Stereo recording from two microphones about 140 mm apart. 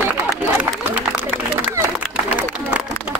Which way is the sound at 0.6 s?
15° right (ahead or behind).